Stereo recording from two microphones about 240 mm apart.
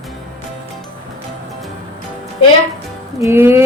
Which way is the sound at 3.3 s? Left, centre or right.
Centre.